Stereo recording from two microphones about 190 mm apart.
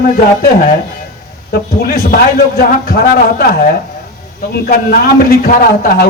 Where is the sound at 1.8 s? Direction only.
50° left (ahead or behind).